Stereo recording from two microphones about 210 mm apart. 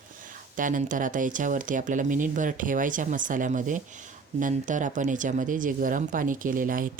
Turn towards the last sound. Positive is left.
turn(degrees=-40)  # may be behind; listen again after turning